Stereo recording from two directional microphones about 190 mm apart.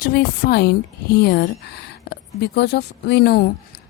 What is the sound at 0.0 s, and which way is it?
A woman's voice, 55° left (ahead or behind).